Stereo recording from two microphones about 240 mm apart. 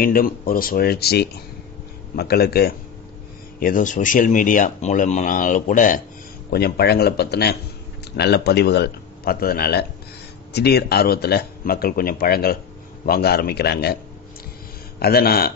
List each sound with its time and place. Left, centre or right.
0.0 s a man's voice: left
15.0 s speech: left